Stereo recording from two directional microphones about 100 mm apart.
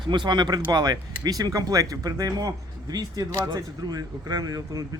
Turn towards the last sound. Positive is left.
turn(degrees=-40)  # may be behind; listen again after turning